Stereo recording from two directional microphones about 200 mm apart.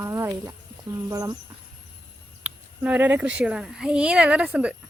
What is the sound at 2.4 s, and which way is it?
Speech, 10° right (ahead or behind).